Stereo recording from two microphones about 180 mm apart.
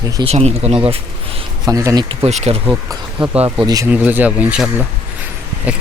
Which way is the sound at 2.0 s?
35° right (ahead or behind).